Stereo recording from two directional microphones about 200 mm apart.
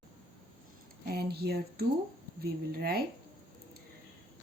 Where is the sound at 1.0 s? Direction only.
50° right (ahead or behind).